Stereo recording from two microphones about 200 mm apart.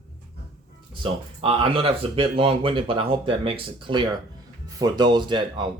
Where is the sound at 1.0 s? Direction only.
25° right (ahead or behind).